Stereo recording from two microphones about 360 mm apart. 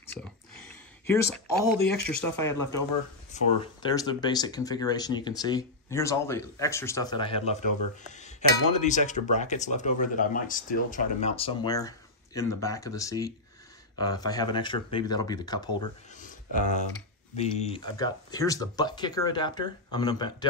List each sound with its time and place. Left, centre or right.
0.0 s a sound: centre
1.0 s speech: centre
1.8 s speech: left
2.0 s speech: centre
8.1 s a sound: centre
12.4 s speech: centre
17.4 s speech: centre